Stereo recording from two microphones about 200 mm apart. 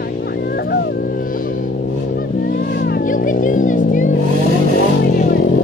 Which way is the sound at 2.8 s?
45° left (ahead or behind).